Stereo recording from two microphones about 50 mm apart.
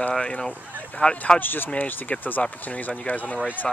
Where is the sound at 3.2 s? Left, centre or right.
Centre.